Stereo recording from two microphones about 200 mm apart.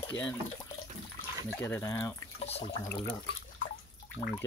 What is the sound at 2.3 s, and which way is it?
Drip, 30° left (ahead or behind).